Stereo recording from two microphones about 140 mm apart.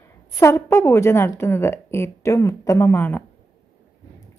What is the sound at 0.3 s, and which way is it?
A woman's voice, 20° left (ahead or behind).